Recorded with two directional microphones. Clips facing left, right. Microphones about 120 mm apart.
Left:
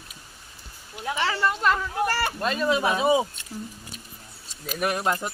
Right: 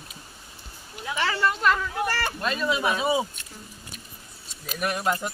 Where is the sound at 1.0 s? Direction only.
30° left (ahead or behind).